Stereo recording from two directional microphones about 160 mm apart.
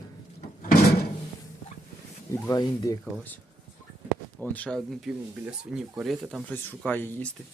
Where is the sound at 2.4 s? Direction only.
20° left (ahead or behind).